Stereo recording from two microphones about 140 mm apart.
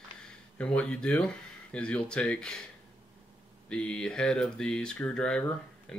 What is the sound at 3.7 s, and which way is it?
Speech, 5° left (ahead or behind).